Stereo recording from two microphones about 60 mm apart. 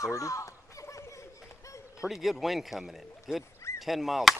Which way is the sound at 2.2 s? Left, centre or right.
Centre.